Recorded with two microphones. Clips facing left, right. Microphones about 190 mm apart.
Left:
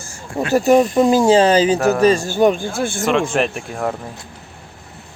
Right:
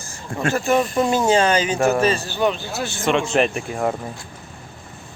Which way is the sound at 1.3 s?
30° left (ahead or behind).